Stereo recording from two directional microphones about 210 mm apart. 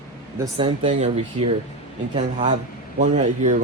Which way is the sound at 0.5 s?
25° right (ahead or behind).